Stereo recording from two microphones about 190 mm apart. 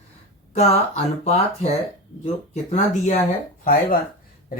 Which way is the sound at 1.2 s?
35° left (ahead or behind).